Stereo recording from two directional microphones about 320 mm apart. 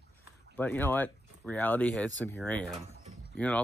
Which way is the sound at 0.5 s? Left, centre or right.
Centre.